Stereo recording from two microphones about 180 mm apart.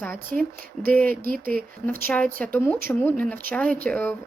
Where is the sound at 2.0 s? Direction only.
10° left (ahead or behind).